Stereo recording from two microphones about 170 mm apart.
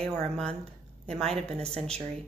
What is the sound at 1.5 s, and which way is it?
Speech, 40° right (ahead or behind).